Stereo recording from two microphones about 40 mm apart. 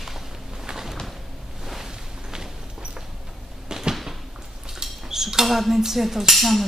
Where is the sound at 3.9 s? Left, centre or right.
Centre.